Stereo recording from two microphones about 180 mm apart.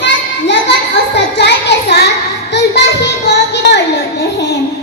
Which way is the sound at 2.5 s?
70° left (ahead or behind).